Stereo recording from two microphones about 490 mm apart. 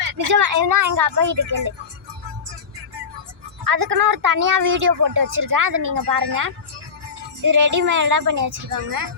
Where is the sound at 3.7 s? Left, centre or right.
Right.